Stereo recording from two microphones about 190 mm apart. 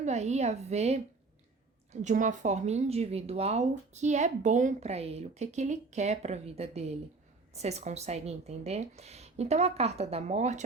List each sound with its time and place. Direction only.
0.0 s a woman's voice: 35° right (ahead or behind)